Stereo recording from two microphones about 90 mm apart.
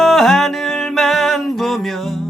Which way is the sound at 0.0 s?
Centre (ahead or behind).